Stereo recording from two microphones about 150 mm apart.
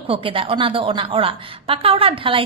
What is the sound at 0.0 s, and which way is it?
A woman's voice, 35° right (ahead or behind).